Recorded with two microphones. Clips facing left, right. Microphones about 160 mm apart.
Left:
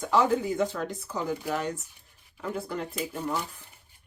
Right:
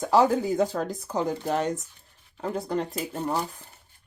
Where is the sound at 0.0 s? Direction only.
35° right (ahead or behind).